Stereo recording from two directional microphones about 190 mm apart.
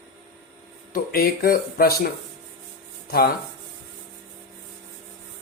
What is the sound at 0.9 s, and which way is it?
Speech, 50° left (ahead or behind).